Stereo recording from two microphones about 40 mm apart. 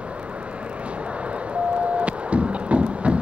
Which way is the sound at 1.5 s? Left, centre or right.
Right.